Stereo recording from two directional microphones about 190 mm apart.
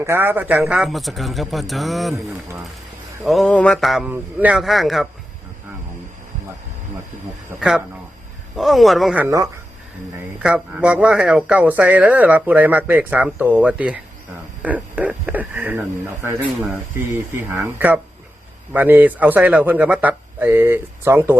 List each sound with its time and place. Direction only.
0.0 s speech: 10° right (ahead or behind)
2.1 s a man's voice: 15° right (ahead or behind)
3.2 s speech: centre (ahead or behind)
7.5 s a man's voice: 15° right (ahead or behind)
8.5 s speech: centre (ahead or behind)
10.4 s a man's voice: 5° right (ahead or behind)
17.3 s a man's voice: 15° right (ahead or behind)